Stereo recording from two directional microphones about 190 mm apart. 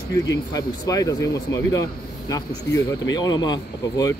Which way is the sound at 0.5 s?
20° left (ahead or behind).